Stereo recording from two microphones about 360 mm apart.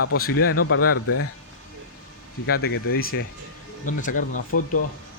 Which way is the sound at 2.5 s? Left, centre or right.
Left.